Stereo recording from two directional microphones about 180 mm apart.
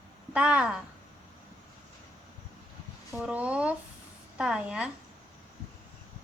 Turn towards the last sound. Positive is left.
turn(degrees=-5)  # may be behind; listen again after turning